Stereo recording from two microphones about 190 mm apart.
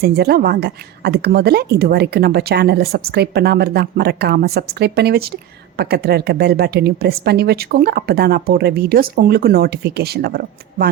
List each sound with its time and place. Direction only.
0.0 s speech: 55° right (ahead or behind)